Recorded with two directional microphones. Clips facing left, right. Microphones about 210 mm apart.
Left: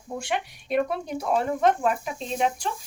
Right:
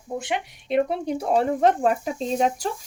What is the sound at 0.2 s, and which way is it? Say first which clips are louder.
Speech: right 1 dB; 20° right (ahead or behind).